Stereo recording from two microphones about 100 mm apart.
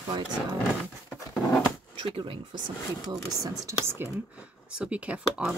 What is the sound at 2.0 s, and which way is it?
Speech, 55° right (ahead or behind).